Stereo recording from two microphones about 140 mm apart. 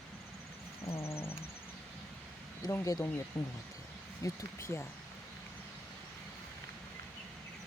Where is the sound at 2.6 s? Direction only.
20° left (ahead or behind).